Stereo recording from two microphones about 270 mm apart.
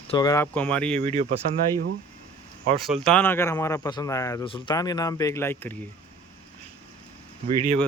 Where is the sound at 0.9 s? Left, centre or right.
Right.